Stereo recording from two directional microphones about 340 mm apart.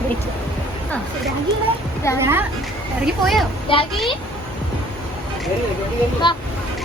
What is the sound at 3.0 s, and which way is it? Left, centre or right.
Speech, centre.